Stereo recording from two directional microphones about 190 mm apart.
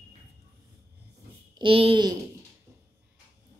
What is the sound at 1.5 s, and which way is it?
Speech, 30° right (ahead or behind).